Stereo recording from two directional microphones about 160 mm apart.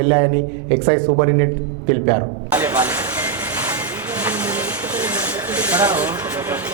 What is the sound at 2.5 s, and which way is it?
Speech, 10° right (ahead or behind).